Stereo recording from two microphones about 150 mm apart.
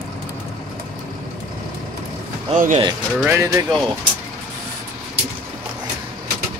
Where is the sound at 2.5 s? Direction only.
55° right (ahead or behind).